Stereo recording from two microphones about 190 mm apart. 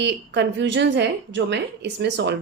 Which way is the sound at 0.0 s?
65° right (ahead or behind).